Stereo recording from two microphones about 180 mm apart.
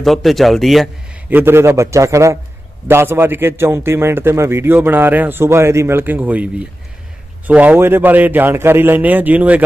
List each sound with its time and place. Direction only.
0.0 s speech: centre (ahead or behind)
1.3 s a man's voice: 15° right (ahead or behind)